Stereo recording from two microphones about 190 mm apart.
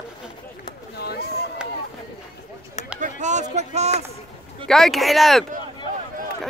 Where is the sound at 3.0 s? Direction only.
40° right (ahead or behind).